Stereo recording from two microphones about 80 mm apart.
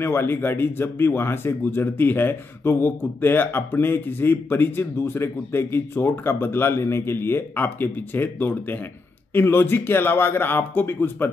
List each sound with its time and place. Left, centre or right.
0.0 s speech: left